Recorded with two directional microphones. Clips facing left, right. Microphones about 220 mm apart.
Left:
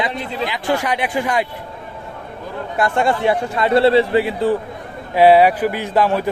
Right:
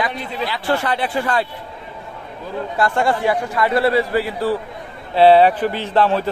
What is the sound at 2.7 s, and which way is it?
A man's voice, 20° left (ahead or behind).